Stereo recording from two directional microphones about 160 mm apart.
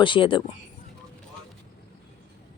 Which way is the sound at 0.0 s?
30° left (ahead or behind).